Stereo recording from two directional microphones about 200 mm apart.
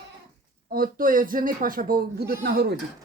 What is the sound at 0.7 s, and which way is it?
A man's voice, 45° right (ahead or behind).